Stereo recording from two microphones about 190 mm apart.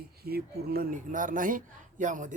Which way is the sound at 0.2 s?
55° right (ahead or behind).